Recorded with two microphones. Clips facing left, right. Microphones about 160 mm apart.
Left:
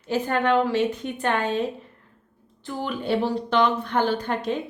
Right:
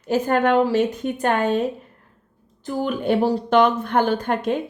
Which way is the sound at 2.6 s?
50° right (ahead or behind).